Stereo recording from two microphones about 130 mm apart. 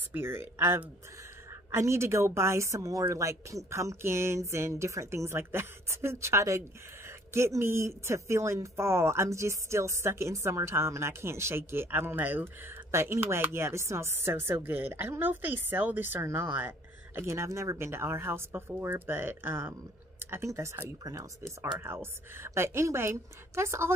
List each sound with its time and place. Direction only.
0.1 s a woman's voice: 20° right (ahead or behind)